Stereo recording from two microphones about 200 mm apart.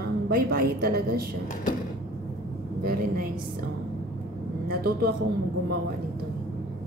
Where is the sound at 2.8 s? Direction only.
45° right (ahead or behind).